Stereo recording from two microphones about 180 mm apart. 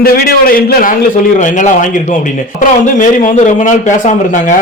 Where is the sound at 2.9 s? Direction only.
45° left (ahead or behind).